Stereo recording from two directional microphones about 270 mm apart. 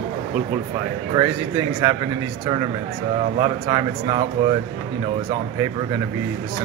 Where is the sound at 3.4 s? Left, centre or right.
Centre.